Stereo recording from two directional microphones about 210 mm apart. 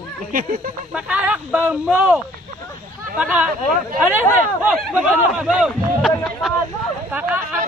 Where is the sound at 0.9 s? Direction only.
5° right (ahead or behind).